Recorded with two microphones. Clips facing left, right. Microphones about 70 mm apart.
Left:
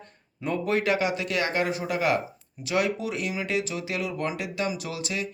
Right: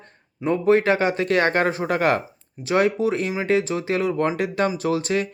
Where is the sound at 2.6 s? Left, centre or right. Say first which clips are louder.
Right 7 dB; right.